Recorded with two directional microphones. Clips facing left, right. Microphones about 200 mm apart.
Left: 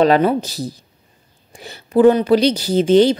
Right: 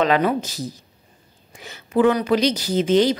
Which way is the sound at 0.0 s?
35° left (ahead or behind).